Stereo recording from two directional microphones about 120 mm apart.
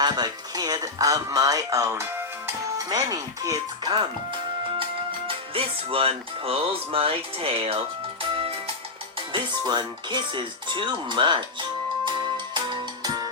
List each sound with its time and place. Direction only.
0.0 s speech: 35° right (ahead or behind)
5.3 s speech: 50° right (ahead or behind)
8.4 s music: 55° right (ahead or behind)
9.3 s speech: 40° right (ahead or behind)
12.5 s music: 40° right (ahead or behind)